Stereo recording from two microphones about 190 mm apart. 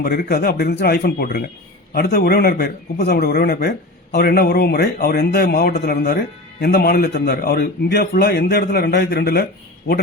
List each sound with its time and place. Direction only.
0.0 s a man's voice: 55° left (ahead or behind)